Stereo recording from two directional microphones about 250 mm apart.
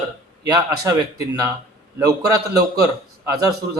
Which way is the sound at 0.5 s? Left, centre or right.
Centre.